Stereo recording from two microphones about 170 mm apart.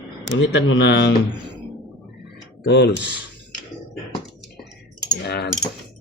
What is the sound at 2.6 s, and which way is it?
Speech, 90° left.